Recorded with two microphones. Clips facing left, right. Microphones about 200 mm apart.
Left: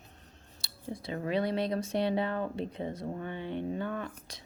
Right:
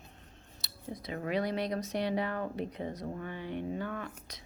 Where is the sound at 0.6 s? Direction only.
30° left (ahead or behind).